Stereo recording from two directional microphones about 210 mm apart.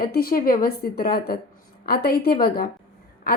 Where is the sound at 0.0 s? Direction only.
45° left (ahead or behind).